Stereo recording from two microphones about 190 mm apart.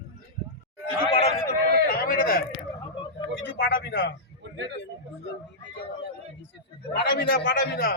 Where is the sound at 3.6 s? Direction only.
50° left (ahead or behind).